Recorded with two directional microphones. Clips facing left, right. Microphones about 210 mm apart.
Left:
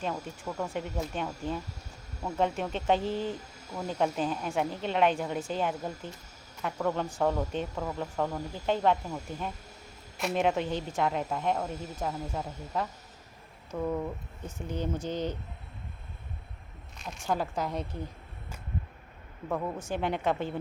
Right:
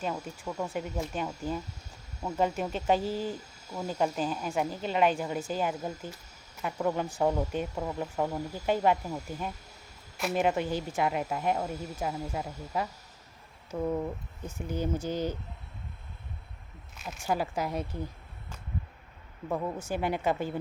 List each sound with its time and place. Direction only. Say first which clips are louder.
0.0 s speech: even; 5° right (ahead or behind)
17.0 s speech: right 1 dB; 5° right (ahead or behind)
19.5 s speech: even; 5° right (ahead or behind)